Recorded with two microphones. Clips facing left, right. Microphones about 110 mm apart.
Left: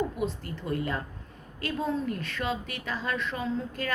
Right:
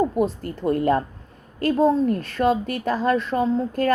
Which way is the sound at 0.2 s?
45° right (ahead or behind).